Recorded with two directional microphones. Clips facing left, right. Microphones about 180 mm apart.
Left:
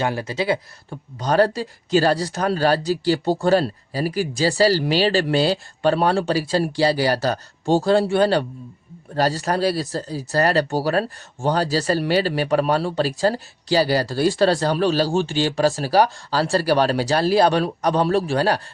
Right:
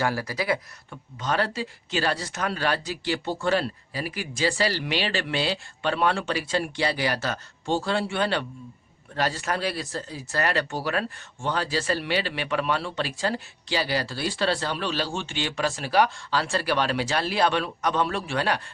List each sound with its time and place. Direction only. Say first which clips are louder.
0.0 s speech: left 4 dB; 20° left (ahead or behind)